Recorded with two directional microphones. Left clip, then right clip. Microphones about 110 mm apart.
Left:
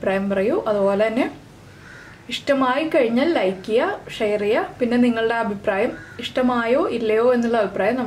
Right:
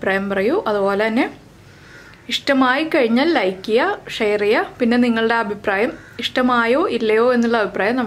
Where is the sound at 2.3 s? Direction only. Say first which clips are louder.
Right 3 dB; 35° right (ahead or behind).